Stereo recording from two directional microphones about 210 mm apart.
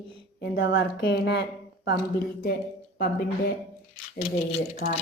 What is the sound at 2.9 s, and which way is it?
Speech, 45° left (ahead or behind).